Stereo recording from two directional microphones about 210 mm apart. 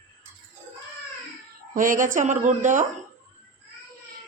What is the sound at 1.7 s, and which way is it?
A woman's voice, 40° right (ahead or behind).